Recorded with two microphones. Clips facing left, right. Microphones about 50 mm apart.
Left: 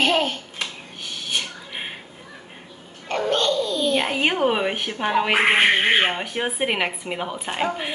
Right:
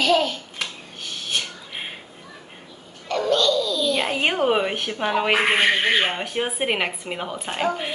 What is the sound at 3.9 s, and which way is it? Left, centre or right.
A woman's voice, centre.